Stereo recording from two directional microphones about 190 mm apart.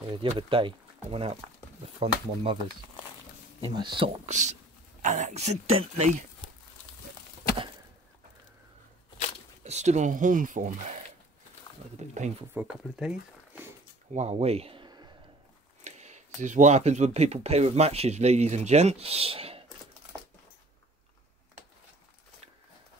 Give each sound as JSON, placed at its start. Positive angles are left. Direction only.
{"t": 0.0, "sound": "speech", "side_deg": -25}
{"t": 3.6, "sound": "speech", "side_deg": -25}
{"t": 4.3, "sound": "speech", "side_deg": -40}
{"t": 9.7, "sound": "speech", "side_deg": -35}
{"t": 12.0, "sound": "speech", "side_deg": -35}
{"t": 12.5, "sound": "speech", "side_deg": -5}
{"t": 14.1, "sound": "speech", "side_deg": -35}
{"t": 15.8, "sound": "speech", "side_deg": -35}